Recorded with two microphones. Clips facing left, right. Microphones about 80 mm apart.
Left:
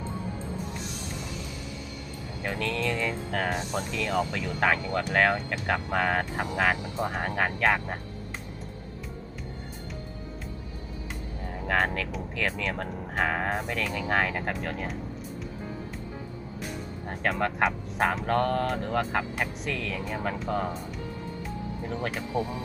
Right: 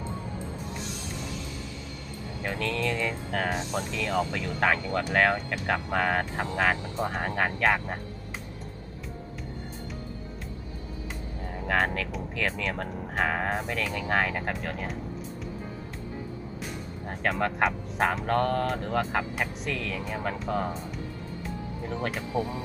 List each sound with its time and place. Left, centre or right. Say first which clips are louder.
2.4 s speech: even; centre
11.5 s speech: even; centre
17.1 s speech: even; centre
21.8 s speech: right 1 dB; centre